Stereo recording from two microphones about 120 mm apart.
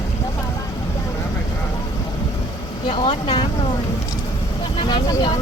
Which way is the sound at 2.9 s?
45° left (ahead or behind).